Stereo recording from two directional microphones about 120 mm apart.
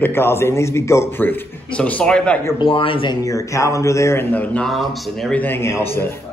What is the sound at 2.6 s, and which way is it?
Speech, 45° left (ahead or behind).